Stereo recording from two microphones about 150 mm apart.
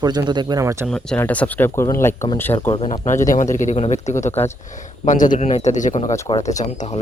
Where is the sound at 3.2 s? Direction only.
60° left (ahead or behind).